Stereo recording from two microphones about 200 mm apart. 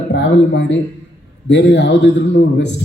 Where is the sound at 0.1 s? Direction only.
60° left (ahead or behind).